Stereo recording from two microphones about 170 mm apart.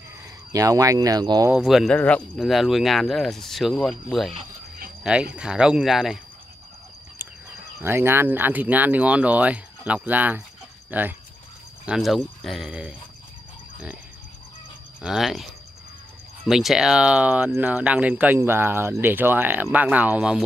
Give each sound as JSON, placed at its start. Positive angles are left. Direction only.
{"t": 0.5, "sound": "speech", "side_deg": -20}
{"t": 1.5, "sound": "speech", "side_deg": 0}
{"t": 5.0, "sound": "speech", "side_deg": -5}
{"t": 7.8, "sound": "speech", "side_deg": -15}
{"t": 15.0, "sound": "speech", "side_deg": 0}
{"t": 16.4, "sound": "speech", "side_deg": -5}